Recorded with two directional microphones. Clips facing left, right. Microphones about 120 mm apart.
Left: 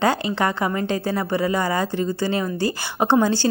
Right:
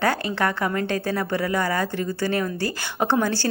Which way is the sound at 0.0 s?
15° left (ahead or behind).